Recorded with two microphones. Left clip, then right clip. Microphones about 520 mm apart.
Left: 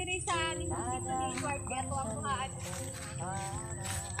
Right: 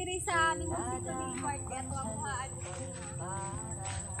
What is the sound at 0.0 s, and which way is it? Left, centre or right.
Child singing, centre.